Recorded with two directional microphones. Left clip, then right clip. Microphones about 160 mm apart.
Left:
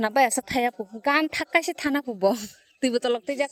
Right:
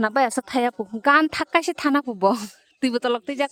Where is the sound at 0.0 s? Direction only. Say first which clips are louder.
Right 1 dB; 15° right (ahead or behind); by 2.9 s 35° right (ahead or behind).